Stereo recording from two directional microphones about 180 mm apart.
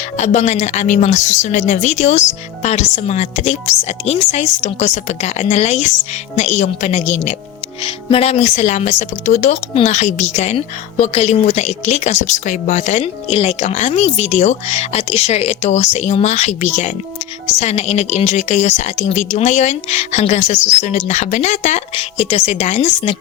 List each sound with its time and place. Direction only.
0.2 s a woman's voice: 40° left (ahead or behind)